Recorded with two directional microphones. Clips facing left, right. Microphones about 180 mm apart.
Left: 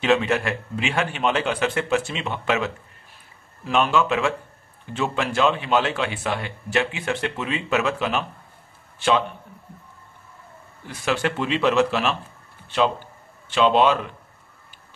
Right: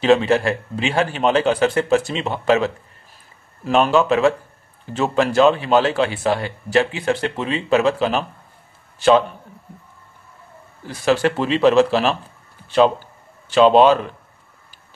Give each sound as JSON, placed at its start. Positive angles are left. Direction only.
{"t": 0.0, "sound": "speech", "side_deg": -35}
{"t": 10.9, "sound": "speech", "side_deg": -35}
{"t": 13.5, "sound": "speech", "side_deg": -40}